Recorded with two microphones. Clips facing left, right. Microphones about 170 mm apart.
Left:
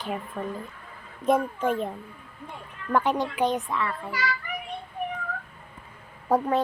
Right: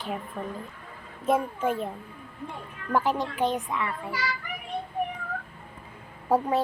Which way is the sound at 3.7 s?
20° right (ahead or behind).